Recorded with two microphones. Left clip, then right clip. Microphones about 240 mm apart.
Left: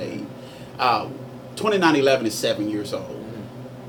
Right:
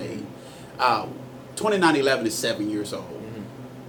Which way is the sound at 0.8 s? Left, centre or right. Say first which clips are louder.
Left 1 dB; left.